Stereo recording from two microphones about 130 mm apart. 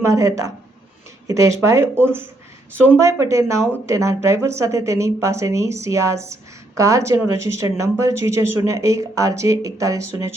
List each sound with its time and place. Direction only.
0.0 s speech: 25° right (ahead or behind)